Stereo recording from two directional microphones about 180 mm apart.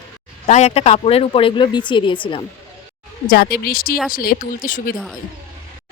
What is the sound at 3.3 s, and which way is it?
Speech, 55° left (ahead or behind).